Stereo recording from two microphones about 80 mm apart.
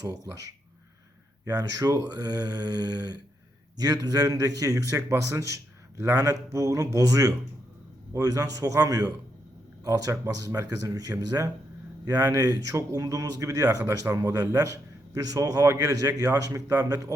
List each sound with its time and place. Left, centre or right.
0.0 s a man's voice: right
1.5 s a man's voice: right